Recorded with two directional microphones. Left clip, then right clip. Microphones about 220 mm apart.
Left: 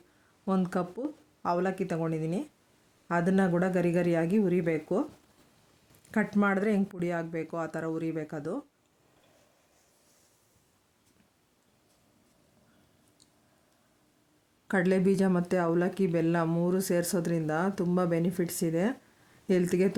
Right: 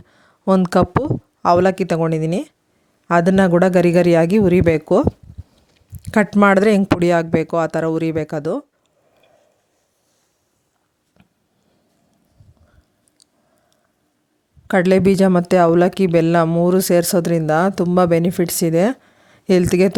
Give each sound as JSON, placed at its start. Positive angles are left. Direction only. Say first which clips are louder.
{"t": 0.4, "sound": "speech", "louder": "right 16 dB", "side_deg": -40}
{"t": 6.1, "sound": "speech", "louder": "right 15 dB", "side_deg": -40}
{"t": 14.7, "sound": "speech", "louder": "right 12 dB", "side_deg": -35}